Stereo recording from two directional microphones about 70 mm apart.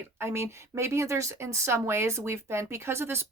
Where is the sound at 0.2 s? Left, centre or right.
Right.